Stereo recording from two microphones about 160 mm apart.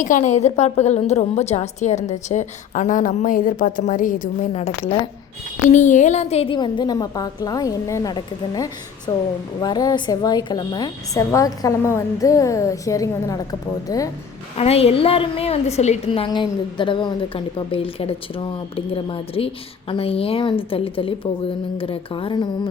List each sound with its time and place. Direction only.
0.0 s a woman's voice: 50° left (ahead or behind)
5.6 s a woman's voice: 50° left (ahead or behind); by 14.1 s 20° left (ahead or behind)
14.5 s a woman's voice: 40° left (ahead or behind)